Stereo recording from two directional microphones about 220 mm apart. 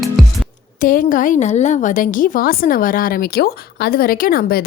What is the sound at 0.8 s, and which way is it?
A woman's voice, 40° left (ahead or behind).